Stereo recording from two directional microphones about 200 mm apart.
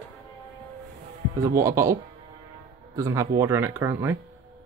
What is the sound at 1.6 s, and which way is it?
Speech, 15° right (ahead or behind).